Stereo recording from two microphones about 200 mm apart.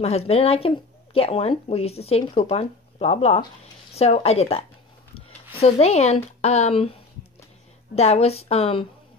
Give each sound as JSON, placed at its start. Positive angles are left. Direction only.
{"t": 0.0, "sound": "speech", "side_deg": 30}